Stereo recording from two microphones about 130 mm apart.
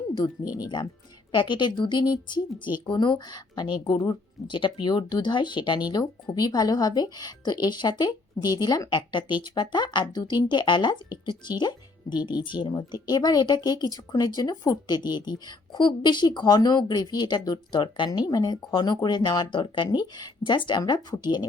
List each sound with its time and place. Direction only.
0.5 s a woman's voice: 30° left (ahead or behind)